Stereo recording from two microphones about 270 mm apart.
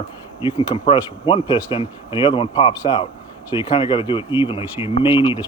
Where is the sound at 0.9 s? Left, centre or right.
Centre.